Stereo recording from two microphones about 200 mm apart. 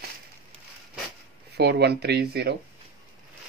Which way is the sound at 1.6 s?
55° right (ahead or behind).